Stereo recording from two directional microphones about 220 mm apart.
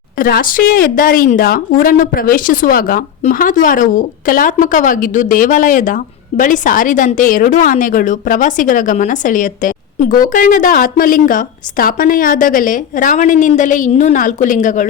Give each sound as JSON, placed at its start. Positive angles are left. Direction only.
{"t": 0.2, "sound": "a woman's voice", "side_deg": 40}